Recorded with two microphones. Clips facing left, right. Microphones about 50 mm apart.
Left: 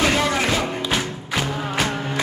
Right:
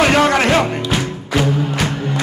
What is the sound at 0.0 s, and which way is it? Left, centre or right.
Music, right.